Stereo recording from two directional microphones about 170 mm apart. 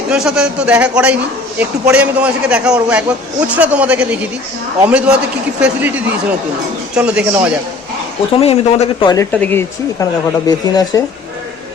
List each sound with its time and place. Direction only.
0.1 s a man's voice: 5° right (ahead or behind)
8.3 s speech: 35° left (ahead or behind)
9.3 s speech: 10° left (ahead or behind)